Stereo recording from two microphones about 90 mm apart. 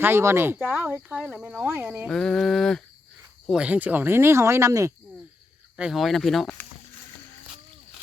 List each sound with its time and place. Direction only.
0.0 s speech: 25° right (ahead or behind)
1.1 s speech: 10° right (ahead or behind)
2.0 s a sound: 5° left (ahead or behind)
3.5 s speech: 15° right (ahead or behind); by 4.9 s 35° right (ahead or behind)
5.7 s speech: 5° right (ahead or behind)